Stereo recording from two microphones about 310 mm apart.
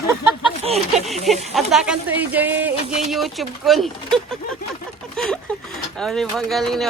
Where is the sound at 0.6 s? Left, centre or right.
Centre.